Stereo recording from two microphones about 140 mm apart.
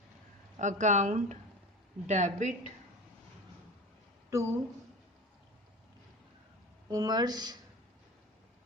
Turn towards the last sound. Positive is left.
turn(degrees=-30)  # may be behind; listen again after turning